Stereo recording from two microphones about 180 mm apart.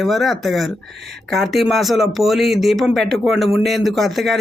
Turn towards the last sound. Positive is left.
turn(degrees=0)  # may be behind; listen again after turning